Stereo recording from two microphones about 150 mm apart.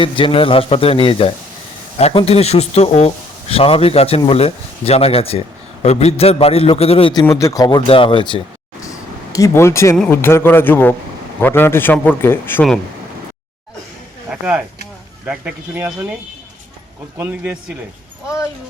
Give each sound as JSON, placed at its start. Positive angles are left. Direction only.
{"t": 0.0, "sound": "a man's voice", "side_deg": 35}
{"t": 7.1, "sound": "speech", "side_deg": 25}
{"t": 7.9, "sound": "a man's voice", "side_deg": 35}
{"t": 8.8, "sound": "vehicle", "side_deg": 20}
{"t": 10.1, "sound": "a man's voice", "side_deg": 15}
{"t": 14.3, "sound": "a sound", "side_deg": -5}
{"t": 15.3, "sound": "speech", "side_deg": -10}
{"t": 17.2, "sound": "speech", "side_deg": -10}